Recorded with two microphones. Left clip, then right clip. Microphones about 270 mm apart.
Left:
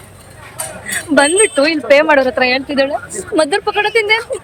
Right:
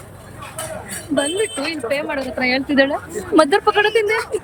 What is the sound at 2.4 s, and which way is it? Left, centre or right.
Speech, centre.